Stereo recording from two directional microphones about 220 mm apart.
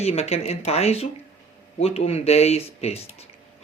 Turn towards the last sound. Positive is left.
turn(degrees=30)  # may be behind; listen again after turning